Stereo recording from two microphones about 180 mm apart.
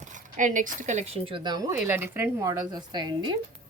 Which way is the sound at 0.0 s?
45° right (ahead or behind).